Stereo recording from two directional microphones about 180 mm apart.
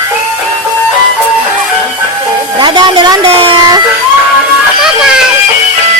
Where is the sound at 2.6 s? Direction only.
25° right (ahead or behind).